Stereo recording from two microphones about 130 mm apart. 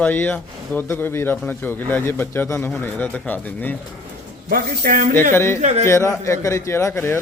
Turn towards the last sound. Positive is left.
turn(degrees=20)  # may be behind; listen again after turning